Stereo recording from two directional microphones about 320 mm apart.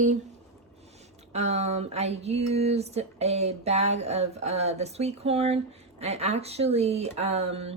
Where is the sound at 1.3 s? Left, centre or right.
Centre.